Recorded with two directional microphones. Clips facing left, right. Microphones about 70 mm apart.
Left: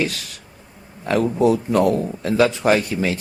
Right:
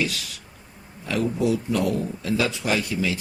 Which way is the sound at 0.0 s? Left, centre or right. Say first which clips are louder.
Left 3 dB; left.